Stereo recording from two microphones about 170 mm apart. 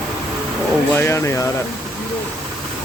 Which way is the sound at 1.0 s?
15° left (ahead or behind).